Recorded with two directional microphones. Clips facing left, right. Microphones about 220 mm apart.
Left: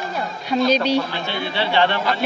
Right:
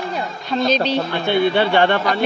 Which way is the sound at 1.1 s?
55° right (ahead or behind).